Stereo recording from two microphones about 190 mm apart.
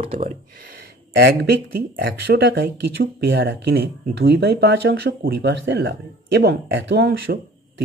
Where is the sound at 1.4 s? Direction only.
55° right (ahead or behind).